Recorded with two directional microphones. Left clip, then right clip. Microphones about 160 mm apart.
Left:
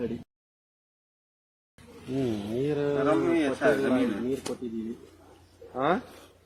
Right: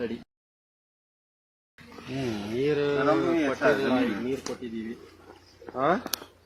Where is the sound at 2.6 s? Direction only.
60° left (ahead or behind).